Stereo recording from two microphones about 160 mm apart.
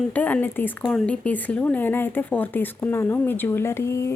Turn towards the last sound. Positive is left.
turn(degrees=15)  # may be behind; listen again after turning